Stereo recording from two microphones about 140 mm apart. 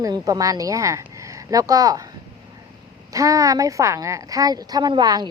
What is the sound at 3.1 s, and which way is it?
A woman's voice, 25° right (ahead or behind).